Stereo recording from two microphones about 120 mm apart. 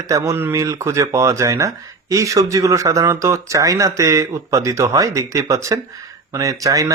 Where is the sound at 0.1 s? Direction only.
25° right (ahead or behind).